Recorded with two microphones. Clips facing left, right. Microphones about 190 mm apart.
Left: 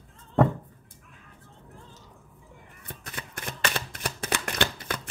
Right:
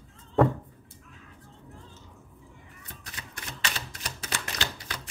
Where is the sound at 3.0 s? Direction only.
55° left (ahead or behind).